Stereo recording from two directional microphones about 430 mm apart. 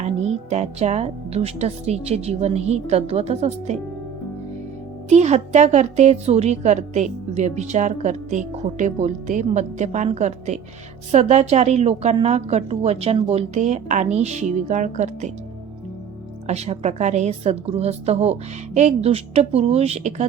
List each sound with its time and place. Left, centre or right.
0.5 s a woman's voice: centre
5.0 s a woman's voice: centre
16.5 s a woman's voice: centre